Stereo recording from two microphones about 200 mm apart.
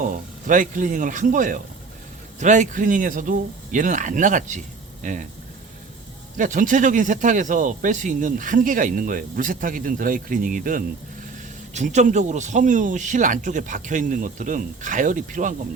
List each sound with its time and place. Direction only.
0.0 s speech: 40° right (ahead or behind)
6.3 s speech: 40° right (ahead or behind)